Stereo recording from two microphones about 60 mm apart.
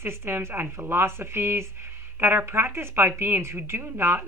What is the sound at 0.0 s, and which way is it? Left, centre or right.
A woman's voice, right.